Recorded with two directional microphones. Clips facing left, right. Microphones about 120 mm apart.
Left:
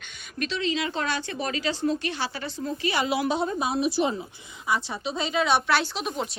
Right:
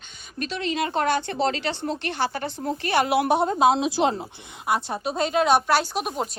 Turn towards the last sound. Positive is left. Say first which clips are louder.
# right 3 dB
turn(degrees=-45)  # may be behind; listen again after turning